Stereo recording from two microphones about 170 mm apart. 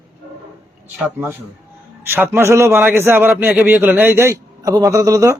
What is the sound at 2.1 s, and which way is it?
A man's voice, 15° right (ahead or behind).